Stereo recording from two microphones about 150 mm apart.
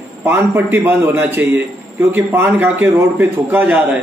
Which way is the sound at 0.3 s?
15° right (ahead or behind).